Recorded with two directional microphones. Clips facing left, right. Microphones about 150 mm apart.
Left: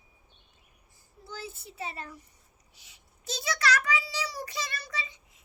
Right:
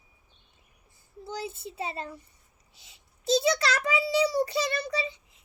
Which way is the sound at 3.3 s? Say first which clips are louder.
Right 5 dB; 25° right (ahead or behind).